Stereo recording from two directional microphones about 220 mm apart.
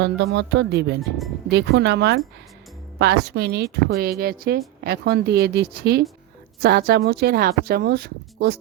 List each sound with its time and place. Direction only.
0.0 s speech: 50° right (ahead or behind)